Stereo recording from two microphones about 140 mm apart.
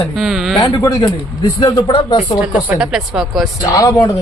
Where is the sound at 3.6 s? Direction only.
25° left (ahead or behind).